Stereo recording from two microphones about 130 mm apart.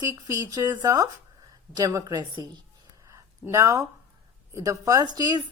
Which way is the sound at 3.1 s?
25° right (ahead or behind).